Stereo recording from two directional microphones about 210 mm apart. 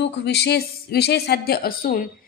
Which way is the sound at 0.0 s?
55° left (ahead or behind).